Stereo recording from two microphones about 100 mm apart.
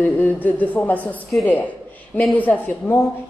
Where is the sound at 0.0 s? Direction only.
20° left (ahead or behind).